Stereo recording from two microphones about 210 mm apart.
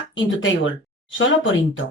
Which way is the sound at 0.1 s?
65° left (ahead or behind).